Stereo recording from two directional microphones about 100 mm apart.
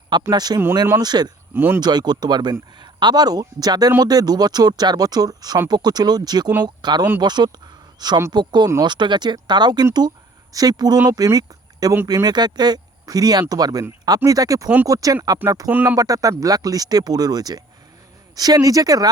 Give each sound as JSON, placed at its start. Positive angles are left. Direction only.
{"t": 0.1, "sound": "speech", "side_deg": -45}
{"t": 1.5, "sound": "speech", "side_deg": -20}
{"t": 1.8, "sound": "speech", "side_deg": -45}
{"t": 15.7, "sound": "speech", "side_deg": -20}
{"t": 16.0, "sound": "speech", "side_deg": -35}